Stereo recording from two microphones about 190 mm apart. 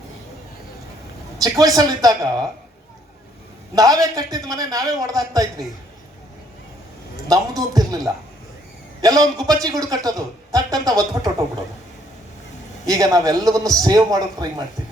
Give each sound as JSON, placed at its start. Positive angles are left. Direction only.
{"t": 1.4, "sound": "speech", "side_deg": -20}
{"t": 3.8, "sound": "speech", "side_deg": -20}
{"t": 7.3, "sound": "speech", "side_deg": -20}
{"t": 12.8, "sound": "speech", "side_deg": -20}